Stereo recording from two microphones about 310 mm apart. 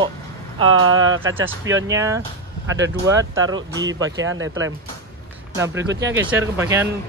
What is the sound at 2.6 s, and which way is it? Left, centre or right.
Speech, right.